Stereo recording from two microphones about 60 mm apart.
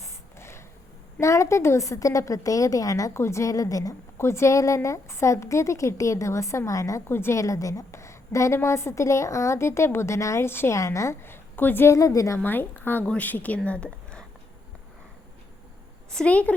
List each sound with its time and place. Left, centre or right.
0.0 s a sound: left
1.2 s a woman's voice: left
3.2 s a woman's voice: left
4.2 s a woman's voice: left
7.1 s a woman's voice: left
7.3 s a woman's voice: left
7.9 s a woman's voice: left
10.4 s a woman's voice: left
10.7 s a woman's voice: left
11.2 s a woman's voice: left
11.9 s a woman's voice: left
12.4 s a woman's voice: left
16.1 s speech: left